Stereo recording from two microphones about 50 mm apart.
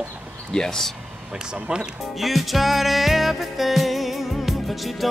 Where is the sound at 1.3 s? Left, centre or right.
Centre.